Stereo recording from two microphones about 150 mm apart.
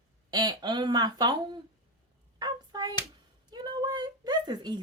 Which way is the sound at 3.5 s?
30° right (ahead or behind).